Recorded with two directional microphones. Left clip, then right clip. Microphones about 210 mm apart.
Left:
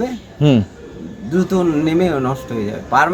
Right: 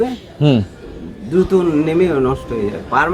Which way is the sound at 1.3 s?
35° left (ahead or behind).